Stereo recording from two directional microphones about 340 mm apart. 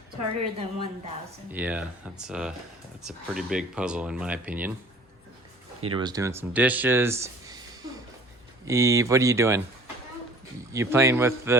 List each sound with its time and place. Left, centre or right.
0.6 s speech: centre
1.5 s speech: centre
5.8 s speech: centre
8.6 s speech: centre